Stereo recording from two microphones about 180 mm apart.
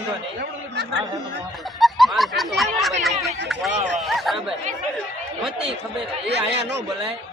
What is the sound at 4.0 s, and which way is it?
Speech, centre (ahead or behind).